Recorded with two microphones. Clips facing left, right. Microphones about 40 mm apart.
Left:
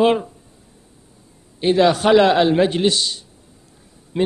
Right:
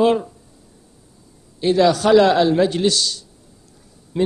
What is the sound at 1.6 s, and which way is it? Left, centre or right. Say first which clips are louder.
A man's voice: even; left.